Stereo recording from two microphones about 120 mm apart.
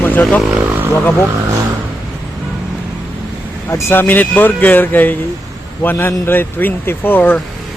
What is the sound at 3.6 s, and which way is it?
Speech, 20° left (ahead or behind).